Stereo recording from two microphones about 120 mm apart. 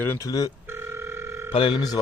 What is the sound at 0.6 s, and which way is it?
Telephone, 20° right (ahead or behind).